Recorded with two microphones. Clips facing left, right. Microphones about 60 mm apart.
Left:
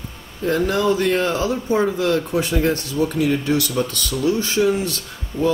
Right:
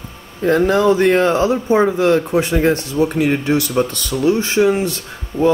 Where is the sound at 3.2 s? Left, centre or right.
Right.